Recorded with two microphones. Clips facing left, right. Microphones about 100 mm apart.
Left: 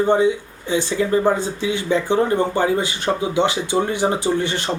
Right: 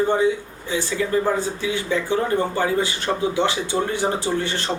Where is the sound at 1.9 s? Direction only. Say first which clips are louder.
Left 4 dB; 20° left (ahead or behind).